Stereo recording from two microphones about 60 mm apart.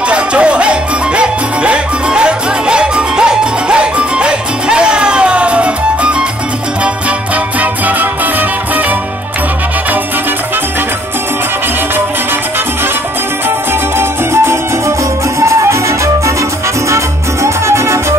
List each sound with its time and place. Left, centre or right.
0.1 s music: centre
7.8 s music: right
13.9 s music: right
16.9 s music: right